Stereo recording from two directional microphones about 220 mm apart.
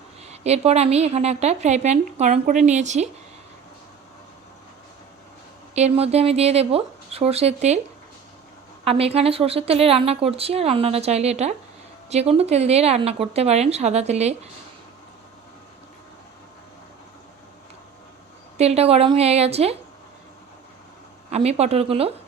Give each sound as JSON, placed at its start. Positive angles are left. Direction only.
{"t": 0.2, "sound": "a woman's voice", "side_deg": -30}
{"t": 5.7, "sound": "a woman's voice", "side_deg": -30}
{"t": 8.8, "sound": "a woman's voice", "side_deg": -25}
{"t": 18.5, "sound": "a woman's voice", "side_deg": -30}
{"t": 21.2, "sound": "a woman's voice", "side_deg": -30}